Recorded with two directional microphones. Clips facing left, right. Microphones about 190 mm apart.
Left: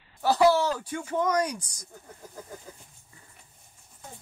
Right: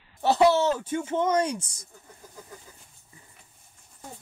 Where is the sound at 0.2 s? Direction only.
25° right (ahead or behind).